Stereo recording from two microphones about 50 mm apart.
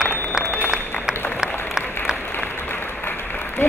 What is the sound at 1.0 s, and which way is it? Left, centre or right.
Applause, centre.